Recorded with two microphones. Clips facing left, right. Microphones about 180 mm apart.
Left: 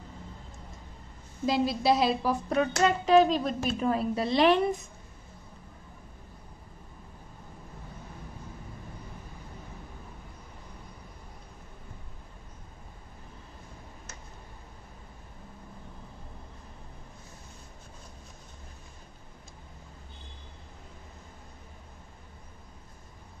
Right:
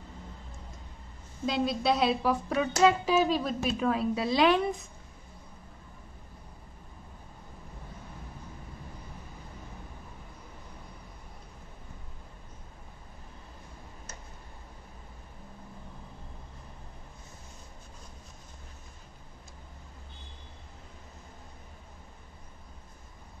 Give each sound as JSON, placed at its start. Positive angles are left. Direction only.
{"t": 1.4, "sound": "a woman's voice", "side_deg": 0}